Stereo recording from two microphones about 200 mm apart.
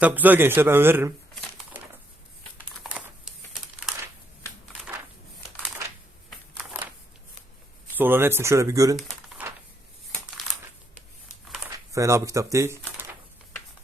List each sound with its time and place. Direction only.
0.0 s a man's voice: 10° right (ahead or behind)
1.4 s crushing: 5° right (ahead or behind)
2.8 s crumpling: centre (ahead or behind)
7.9 s a man's voice: 10° right (ahead or behind)
10.1 s crumpling: 5° left (ahead or behind)
11.9 s speech: 15° right (ahead or behind)